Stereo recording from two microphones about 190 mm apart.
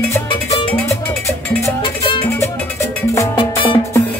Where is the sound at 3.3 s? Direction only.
25° left (ahead or behind).